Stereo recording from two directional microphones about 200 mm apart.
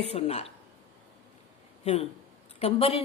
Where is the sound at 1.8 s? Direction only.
30° left (ahead or behind).